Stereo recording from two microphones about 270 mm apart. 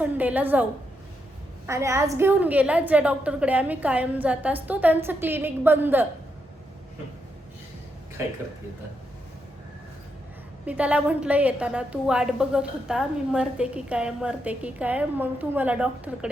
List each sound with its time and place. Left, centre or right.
0.0 s a woman's voice: centre
10.7 s a woman's voice: centre